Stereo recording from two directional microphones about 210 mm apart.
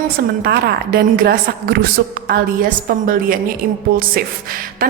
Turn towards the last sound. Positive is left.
turn(degrees=-45)  # may be behind; listen again after turning